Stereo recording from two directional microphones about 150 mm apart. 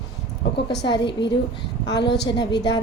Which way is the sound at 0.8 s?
30° left (ahead or behind).